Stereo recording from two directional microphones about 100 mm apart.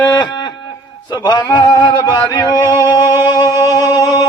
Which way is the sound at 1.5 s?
45° left (ahead or behind).